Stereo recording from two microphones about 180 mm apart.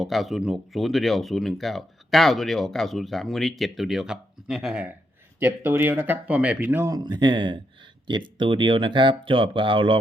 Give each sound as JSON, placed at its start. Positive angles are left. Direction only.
{"t": 0.0, "sound": "speech", "side_deg": 0}